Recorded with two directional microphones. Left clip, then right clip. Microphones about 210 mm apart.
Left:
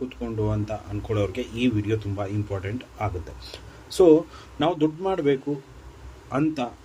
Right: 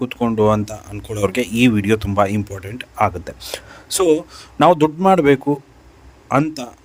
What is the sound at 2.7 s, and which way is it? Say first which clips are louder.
Speech: right 12 dB; 50° right (ahead or behind).